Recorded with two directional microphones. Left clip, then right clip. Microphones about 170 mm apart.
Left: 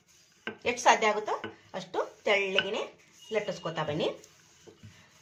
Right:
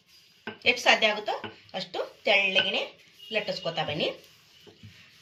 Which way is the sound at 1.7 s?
60° left (ahead or behind).